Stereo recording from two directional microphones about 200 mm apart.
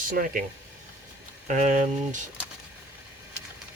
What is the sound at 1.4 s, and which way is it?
Speech, 40° right (ahead or behind).